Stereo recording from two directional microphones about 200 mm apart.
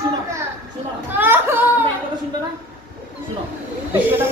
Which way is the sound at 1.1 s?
10° right (ahead or behind).